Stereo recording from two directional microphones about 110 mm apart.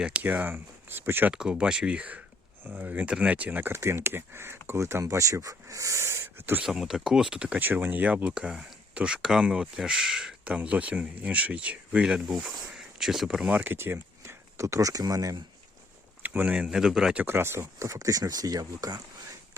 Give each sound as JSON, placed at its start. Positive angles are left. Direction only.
{"t": 0.0, "sound": "speech", "side_deg": -15}
{"t": 1.3, "sound": "speech", "side_deg": -5}
{"t": 6.7, "sound": "speech", "side_deg": -5}
{"t": 13.6, "sound": "speech", "side_deg": -20}
{"t": 16.2, "sound": "speech", "side_deg": -15}
{"t": 17.2, "sound": "speech", "side_deg": -20}